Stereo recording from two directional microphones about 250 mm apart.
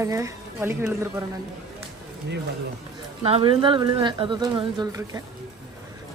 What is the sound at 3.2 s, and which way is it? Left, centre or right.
Speech, right.